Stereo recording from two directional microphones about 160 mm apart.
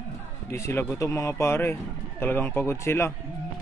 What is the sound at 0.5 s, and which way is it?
Speech, 15° left (ahead or behind).